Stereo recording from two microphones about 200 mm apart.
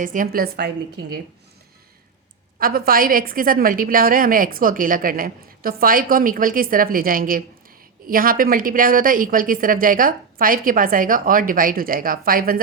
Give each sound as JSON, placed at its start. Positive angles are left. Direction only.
{"t": 0.0, "sound": "a woman's voice", "side_deg": -40}
{"t": 2.6, "sound": "a woman's voice", "side_deg": -45}